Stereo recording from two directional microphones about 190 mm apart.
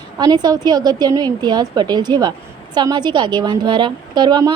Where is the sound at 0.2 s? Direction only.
20° right (ahead or behind).